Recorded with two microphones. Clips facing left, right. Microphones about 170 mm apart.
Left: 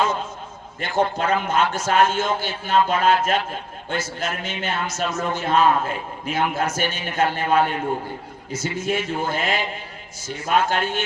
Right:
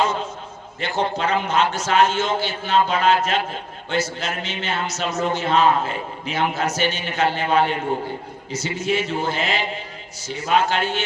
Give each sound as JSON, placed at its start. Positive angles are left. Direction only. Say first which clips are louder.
{"t": 0.8, "sound": "a man's voice", "louder": "left 1 dB", "side_deg": 50}